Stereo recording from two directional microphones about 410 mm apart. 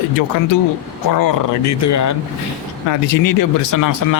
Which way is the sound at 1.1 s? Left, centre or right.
Left.